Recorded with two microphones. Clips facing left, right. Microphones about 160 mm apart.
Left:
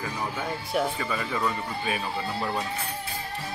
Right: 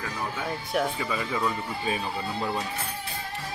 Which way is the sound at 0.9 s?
10° right (ahead or behind).